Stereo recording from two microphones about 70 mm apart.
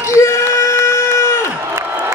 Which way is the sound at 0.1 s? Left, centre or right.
Left.